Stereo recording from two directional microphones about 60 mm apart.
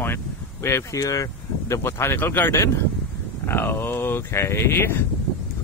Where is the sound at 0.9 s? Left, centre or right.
Left.